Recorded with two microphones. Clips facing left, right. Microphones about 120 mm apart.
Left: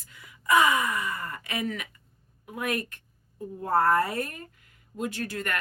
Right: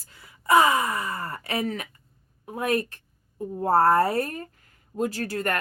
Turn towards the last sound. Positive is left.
turn(degrees=-40)  # may be behind; listen again after turning